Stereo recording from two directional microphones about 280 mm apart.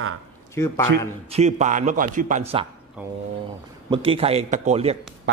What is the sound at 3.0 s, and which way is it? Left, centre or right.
Speech, centre.